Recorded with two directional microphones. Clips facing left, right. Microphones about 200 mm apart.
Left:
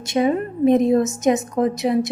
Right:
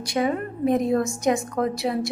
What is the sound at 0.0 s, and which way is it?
A woman's voice, 25° left (ahead or behind).